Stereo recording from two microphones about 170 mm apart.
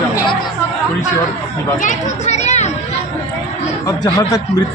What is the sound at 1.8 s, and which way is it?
Speech, 45° left (ahead or behind).